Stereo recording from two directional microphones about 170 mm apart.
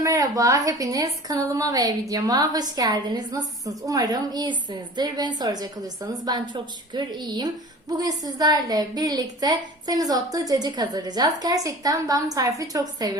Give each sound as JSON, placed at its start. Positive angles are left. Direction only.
{"t": 0.0, "sound": "a woman's voice", "side_deg": -20}